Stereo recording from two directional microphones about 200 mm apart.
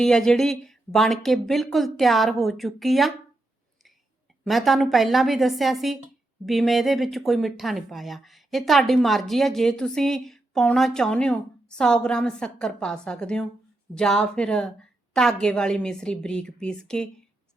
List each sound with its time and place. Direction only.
0.0 s speech: 5° left (ahead or behind)
4.4 s speech: centre (ahead or behind)